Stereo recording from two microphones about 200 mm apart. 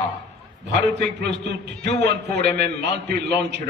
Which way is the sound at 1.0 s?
60° right (ahead or behind).